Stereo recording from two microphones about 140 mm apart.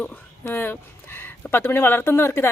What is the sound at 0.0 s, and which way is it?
A woman's voice, 15° left (ahead or behind).